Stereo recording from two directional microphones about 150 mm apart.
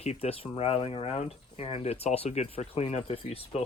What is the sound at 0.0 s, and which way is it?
Speech, 45° left (ahead or behind).